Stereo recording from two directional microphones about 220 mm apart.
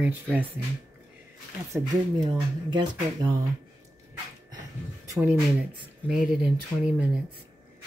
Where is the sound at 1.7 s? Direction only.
15° right (ahead or behind).